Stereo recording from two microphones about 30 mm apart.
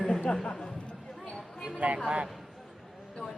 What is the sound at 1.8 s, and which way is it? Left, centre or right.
Speech, right.